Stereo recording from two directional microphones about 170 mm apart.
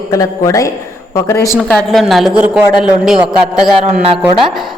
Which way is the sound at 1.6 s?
Centre (ahead or behind).